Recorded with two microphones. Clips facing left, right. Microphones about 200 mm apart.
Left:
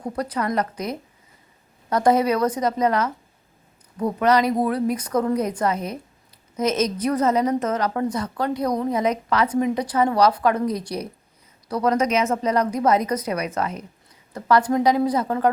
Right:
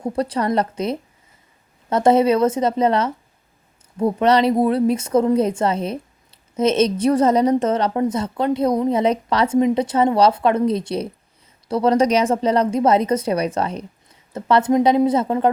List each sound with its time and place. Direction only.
0.0 s a woman's voice: 30° right (ahead or behind)